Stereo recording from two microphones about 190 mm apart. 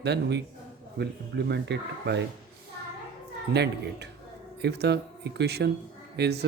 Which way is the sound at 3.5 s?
60° right (ahead or behind).